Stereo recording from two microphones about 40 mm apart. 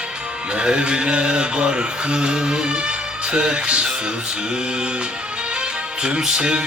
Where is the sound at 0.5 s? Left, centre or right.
Right.